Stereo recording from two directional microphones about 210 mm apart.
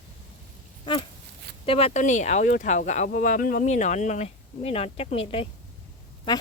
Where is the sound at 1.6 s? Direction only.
25° left (ahead or behind).